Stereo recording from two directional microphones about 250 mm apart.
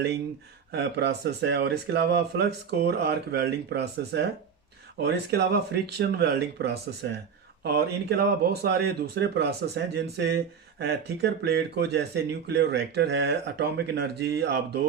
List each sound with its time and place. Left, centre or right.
0.7 s speech: right